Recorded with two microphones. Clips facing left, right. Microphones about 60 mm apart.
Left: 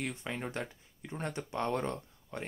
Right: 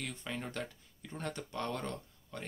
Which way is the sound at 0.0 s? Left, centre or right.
Left.